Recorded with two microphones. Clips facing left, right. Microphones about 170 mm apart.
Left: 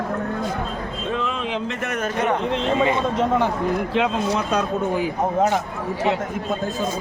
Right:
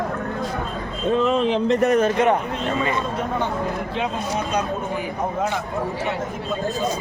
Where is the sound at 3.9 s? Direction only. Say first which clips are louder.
Left 4 dB; 90° left.